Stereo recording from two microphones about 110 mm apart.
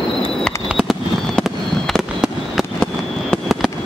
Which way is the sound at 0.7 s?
5° right (ahead or behind).